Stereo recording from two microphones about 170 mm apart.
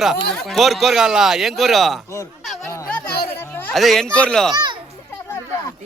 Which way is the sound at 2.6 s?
15° left (ahead or behind).